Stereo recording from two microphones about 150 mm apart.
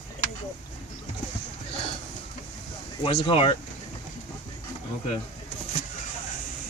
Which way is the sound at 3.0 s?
40° left (ahead or behind).